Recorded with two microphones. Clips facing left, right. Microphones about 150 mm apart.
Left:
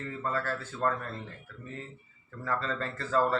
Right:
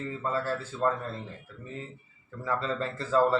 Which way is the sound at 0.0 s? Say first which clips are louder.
Right 2 dB; 20° right (ahead or behind).